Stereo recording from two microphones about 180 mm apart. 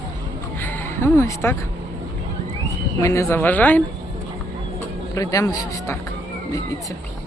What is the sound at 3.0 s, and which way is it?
Speech, 15° left (ahead or behind).